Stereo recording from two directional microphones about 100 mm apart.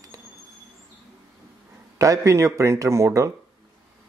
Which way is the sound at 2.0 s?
30° right (ahead or behind).